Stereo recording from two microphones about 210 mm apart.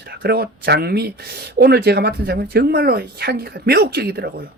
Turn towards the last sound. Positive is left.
turn(degrees=-45)  # may be behind; listen again after turning